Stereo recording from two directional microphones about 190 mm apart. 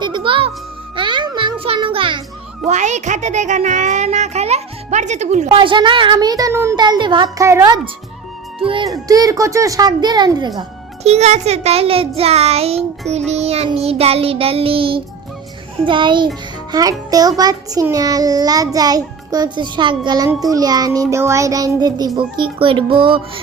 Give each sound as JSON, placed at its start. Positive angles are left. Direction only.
{"t": 0.0, "sound": "music", "side_deg": -25}
{"t": 2.6, "sound": "speech", "side_deg": -40}
{"t": 9.0, "sound": "child singing", "side_deg": -20}
{"t": 11.0, "sound": "speech", "side_deg": -35}
{"t": 15.8, "sound": "child singing", "side_deg": -25}